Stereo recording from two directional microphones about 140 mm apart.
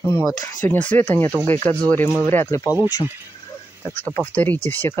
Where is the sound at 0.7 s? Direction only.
10° left (ahead or behind).